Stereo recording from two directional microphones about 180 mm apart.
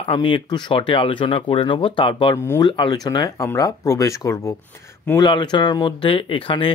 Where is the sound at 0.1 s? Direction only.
25° left (ahead or behind).